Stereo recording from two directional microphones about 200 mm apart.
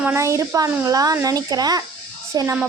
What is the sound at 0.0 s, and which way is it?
A woman's voice, 10° right (ahead or behind).